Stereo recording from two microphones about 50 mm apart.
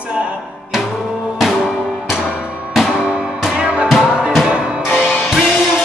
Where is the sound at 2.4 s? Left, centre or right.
Right.